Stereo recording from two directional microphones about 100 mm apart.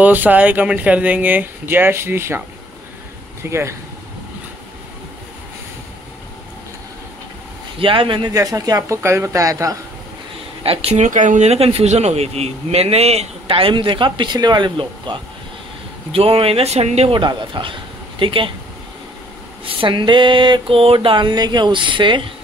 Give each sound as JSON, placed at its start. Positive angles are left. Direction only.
{"t": 0.0, "sound": "speech", "side_deg": -15}
{"t": 3.4, "sound": "speech", "side_deg": -25}
{"t": 7.8, "sound": "a sound", "side_deg": -60}
{"t": 8.3, "sound": "speech", "side_deg": -35}
{"t": 10.6, "sound": "speech", "side_deg": -75}
{"t": 11.4, "sound": "a man's voice", "side_deg": -85}
{"t": 16.1, "sound": "a man's voice", "side_deg": -70}
{"t": 17.1, "sound": "a sound", "side_deg": -55}
{"t": 19.6, "sound": "a sound", "side_deg": -65}